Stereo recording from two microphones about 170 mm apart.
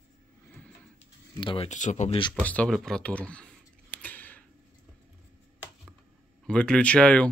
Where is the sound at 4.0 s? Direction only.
10° left (ahead or behind).